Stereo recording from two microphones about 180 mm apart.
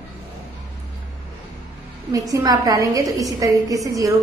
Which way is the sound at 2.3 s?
20° right (ahead or behind).